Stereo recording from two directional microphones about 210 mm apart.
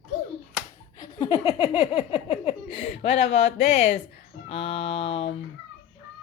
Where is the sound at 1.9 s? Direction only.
25° left (ahead or behind).